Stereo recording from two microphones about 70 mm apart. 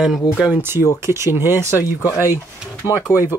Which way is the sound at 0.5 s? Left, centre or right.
Right.